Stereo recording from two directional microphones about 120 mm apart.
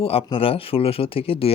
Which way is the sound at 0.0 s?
55° left (ahead or behind).